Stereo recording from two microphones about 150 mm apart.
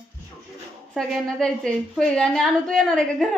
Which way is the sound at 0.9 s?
5° left (ahead or behind).